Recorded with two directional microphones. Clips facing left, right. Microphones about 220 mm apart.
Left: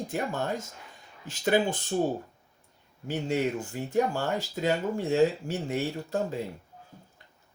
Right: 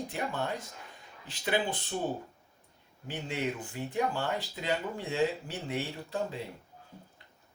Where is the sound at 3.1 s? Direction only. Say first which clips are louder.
Left 6 dB; 45° left (ahead or behind).